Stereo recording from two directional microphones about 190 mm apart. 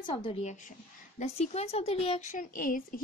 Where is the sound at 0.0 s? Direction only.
30° left (ahead or behind).